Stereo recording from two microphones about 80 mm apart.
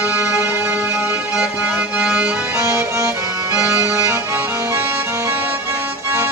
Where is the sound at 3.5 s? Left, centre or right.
Right.